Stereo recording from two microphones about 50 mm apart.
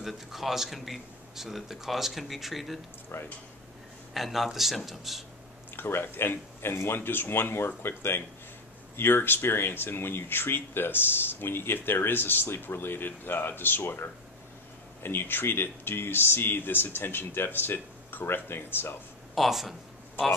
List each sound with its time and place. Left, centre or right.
0.0 s a man's voice: centre
3.1 s speech: left
4.1 s a man's voice: centre
5.8 s speech: left
15.0 s speech: left
19.3 s a man's voice: centre